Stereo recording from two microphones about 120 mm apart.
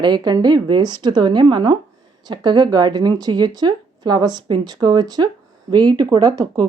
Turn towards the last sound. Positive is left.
turn(degrees=-35)  # may be behind; listen again after turning